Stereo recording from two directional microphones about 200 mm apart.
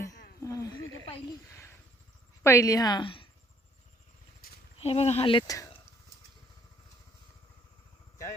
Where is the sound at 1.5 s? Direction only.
15° left (ahead or behind).